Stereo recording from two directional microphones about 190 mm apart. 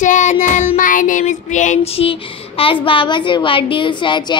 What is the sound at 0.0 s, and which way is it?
Child singing, 40° left (ahead or behind).